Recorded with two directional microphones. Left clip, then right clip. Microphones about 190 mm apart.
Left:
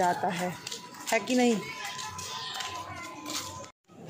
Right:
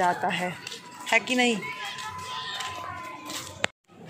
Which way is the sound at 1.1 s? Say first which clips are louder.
Right 3 dB; 35° left (ahead or behind).